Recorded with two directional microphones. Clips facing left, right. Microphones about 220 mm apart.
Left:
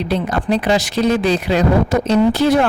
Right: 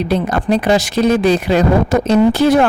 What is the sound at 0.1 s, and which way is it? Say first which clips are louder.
Speech: right 2 dB; 45° right (ahead or behind).